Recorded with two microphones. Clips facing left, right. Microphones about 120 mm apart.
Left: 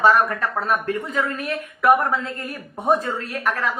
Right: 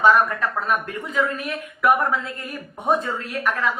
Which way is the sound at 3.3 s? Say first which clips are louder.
Right 1 dB; 40° left (ahead or behind).